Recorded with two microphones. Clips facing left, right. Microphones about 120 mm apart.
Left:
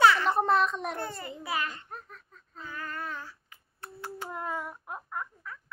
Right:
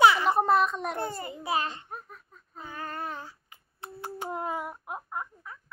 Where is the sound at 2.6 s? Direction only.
25° right (ahead or behind).